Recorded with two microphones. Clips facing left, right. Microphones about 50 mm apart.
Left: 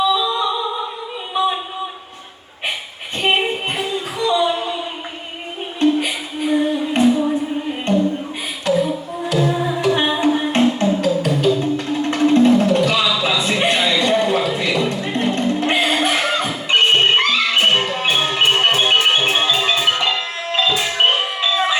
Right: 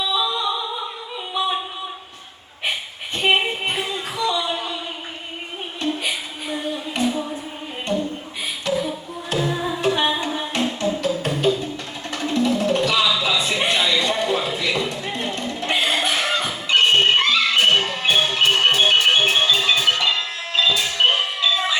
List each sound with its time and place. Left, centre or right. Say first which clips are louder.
3.2 s music: left 1 dB; left
4.2 s a sound: left 6 dB; left
5.8 s music: left 8 dB; left
7.9 s a sound: left 5 dB; left
9.9 s music: left 5 dB; left
11.5 s music: left 2 dB; right
11.9 s music: left 12 dB; left